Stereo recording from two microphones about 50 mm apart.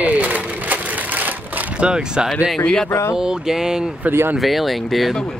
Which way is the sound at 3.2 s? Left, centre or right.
Centre.